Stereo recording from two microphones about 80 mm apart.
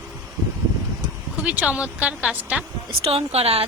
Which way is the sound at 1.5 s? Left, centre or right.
Centre.